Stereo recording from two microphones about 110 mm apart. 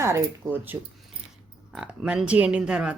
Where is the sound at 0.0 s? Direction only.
25° right (ahead or behind).